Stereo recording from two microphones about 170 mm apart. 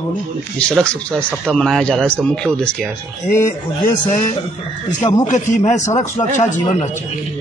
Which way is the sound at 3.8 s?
50° left (ahead or behind).